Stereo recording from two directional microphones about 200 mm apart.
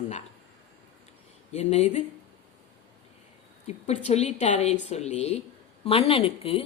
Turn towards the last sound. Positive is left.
turn(degrees=30)  # may be behind; listen again after turning